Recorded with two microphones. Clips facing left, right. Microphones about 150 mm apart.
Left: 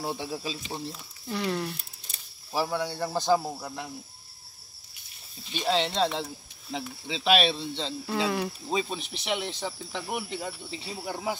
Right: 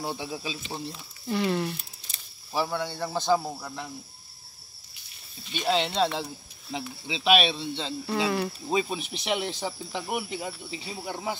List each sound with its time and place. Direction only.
0.0 s speech: centre (ahead or behind)
5.5 s speech: centre (ahead or behind)